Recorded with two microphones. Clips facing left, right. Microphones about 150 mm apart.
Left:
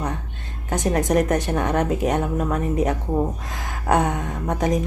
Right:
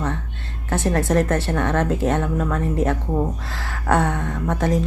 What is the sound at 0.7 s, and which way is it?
A woman's voice, 15° left (ahead or behind).